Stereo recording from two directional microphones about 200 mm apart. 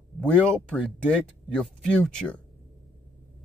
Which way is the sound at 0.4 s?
5° left (ahead or behind).